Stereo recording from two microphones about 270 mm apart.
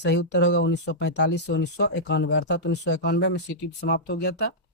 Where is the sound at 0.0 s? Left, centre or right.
Left.